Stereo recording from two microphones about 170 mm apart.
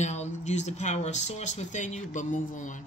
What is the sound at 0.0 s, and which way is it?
Speech, 45° left (ahead or behind).